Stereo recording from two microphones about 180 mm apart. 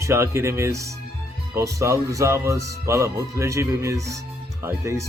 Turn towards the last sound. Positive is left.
turn(degrees=-15)  # may be behind; listen again after turning